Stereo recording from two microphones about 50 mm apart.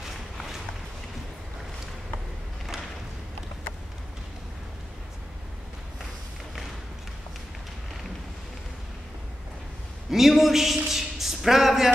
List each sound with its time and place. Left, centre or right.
10.1 s a man's voice: centre